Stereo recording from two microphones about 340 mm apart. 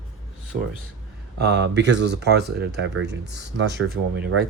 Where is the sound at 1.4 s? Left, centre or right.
Right.